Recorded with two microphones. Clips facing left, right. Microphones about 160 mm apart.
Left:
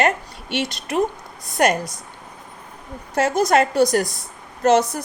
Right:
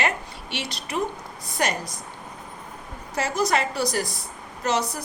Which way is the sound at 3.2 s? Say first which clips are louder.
Left 7 dB; 50° left (ahead or behind).